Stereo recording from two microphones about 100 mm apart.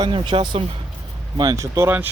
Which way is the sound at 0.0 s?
55° right (ahead or behind).